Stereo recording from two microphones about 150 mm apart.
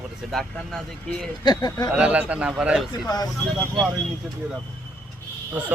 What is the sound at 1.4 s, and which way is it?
Speech, 30° left (ahead or behind).